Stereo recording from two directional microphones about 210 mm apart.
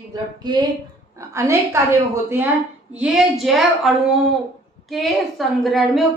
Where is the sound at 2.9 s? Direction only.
5° right (ahead or behind).